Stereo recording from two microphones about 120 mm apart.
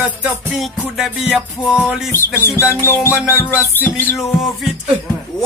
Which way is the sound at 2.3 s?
20° left (ahead or behind).